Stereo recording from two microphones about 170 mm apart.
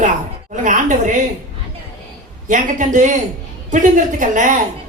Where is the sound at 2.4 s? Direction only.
50° right (ahead or behind).